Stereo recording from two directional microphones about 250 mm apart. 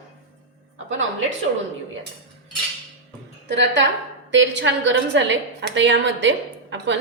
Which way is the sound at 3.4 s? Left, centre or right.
Right.